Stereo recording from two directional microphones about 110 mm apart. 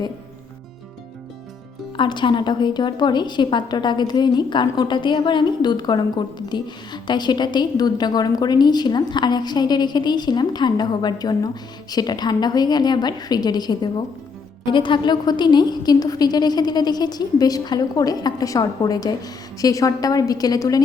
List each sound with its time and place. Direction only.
2.0 s a woman's voice: 45° left (ahead or behind)